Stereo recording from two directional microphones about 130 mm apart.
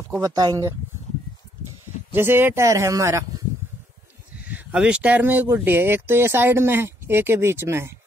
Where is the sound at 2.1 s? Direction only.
15° right (ahead or behind).